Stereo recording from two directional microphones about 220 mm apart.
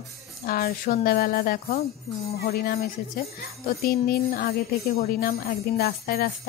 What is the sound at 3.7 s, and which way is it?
A woman's voice, 45° left (ahead or behind).